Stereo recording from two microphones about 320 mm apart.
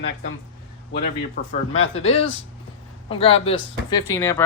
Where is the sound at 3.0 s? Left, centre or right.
Centre.